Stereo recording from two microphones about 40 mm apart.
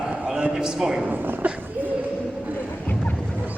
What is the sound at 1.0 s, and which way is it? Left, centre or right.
Speech, right.